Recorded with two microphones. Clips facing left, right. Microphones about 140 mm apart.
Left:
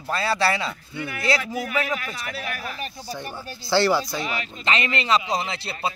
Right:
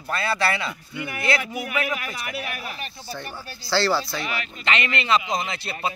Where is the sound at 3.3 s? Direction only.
20° left (ahead or behind).